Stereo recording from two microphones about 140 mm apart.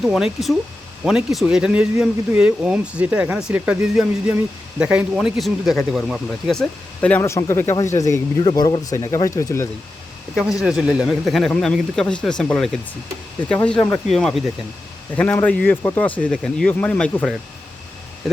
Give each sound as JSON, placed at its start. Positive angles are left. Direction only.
{"t": 0.0, "sound": "speech", "side_deg": 0}
{"t": 7.2, "sound": "speech", "side_deg": 20}
{"t": 10.6, "sound": "speech", "side_deg": -5}
{"t": 15.1, "sound": "speech", "side_deg": 10}